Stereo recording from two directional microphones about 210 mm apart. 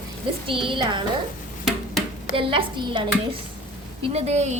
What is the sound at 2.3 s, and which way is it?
A woman's voice, 25° right (ahead or behind).